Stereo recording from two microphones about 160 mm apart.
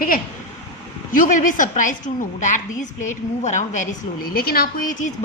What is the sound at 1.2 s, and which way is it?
Speech, 55° left (ahead or behind).